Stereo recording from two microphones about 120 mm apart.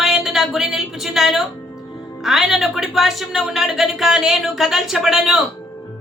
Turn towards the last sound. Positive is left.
turn(degrees=0)  # may be behind; listen again after turning